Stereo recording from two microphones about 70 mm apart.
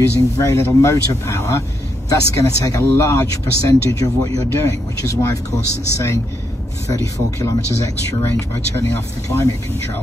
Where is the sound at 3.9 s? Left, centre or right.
Left.